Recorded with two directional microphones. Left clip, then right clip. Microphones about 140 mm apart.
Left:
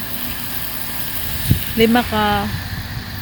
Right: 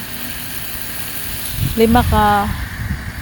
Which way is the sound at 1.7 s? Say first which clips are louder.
Right 2 dB; 25° right (ahead or behind).